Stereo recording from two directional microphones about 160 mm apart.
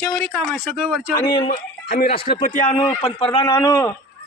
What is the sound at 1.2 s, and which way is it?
Speech, 30° left (ahead or behind).